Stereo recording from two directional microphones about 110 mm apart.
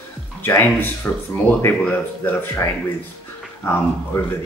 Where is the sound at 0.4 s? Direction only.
20° left (ahead or behind).